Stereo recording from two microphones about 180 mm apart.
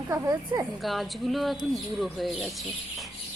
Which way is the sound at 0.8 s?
Centre (ahead or behind).